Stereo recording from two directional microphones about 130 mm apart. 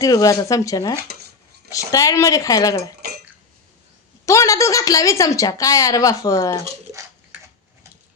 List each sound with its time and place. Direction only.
0.0 s a woman's voice: 25° left (ahead or behind)
4.3 s a woman's voice: 25° left (ahead or behind)